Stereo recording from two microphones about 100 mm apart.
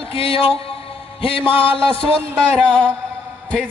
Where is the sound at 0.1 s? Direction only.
65° left (ahead or behind).